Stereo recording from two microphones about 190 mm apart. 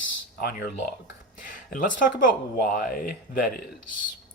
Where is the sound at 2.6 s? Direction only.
50° left (ahead or behind).